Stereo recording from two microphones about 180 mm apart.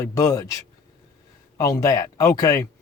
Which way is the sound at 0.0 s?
20° left (ahead or behind).